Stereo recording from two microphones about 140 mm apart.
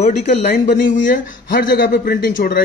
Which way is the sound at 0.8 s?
70° left (ahead or behind).